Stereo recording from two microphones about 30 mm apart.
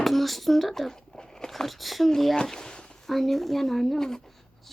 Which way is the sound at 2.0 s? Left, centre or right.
Centre.